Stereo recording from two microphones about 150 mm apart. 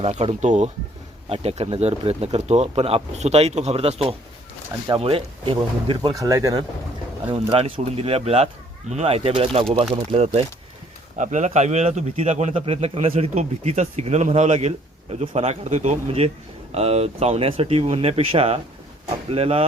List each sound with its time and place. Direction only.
0.0 s speech: 45° right (ahead or behind); by 6.7 s 25° right (ahead or behind)
7.5 s speech: 40° right (ahead or behind)
11.2 s speech: 55° right (ahead or behind)